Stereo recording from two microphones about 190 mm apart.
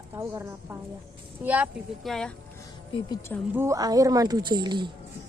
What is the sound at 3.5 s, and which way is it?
Speech, 15° right (ahead or behind).